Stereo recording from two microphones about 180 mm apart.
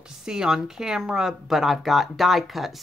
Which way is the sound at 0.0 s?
5° right (ahead or behind).